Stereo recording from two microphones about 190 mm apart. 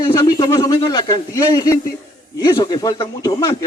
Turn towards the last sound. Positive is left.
turn(degrees=20)  # may be behind; listen again after turning